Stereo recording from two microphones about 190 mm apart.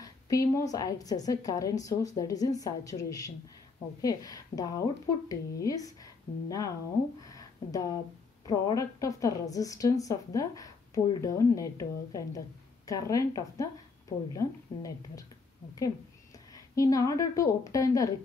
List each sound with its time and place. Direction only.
0.0 s a woman's voice: 15° left (ahead or behind)
7.2 s a sound: 20° left (ahead or behind)
8.5 s a woman's voice: 20° left (ahead or behind)
16.5 s a woman's voice: 15° left (ahead or behind)